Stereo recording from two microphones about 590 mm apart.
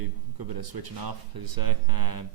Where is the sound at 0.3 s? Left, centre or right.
Right.